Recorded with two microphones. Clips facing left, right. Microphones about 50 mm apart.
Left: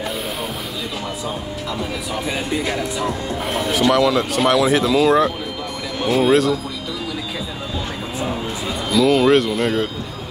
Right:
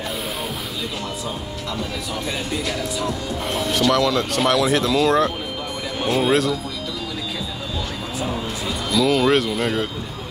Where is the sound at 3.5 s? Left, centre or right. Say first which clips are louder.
Left 2 dB; centre.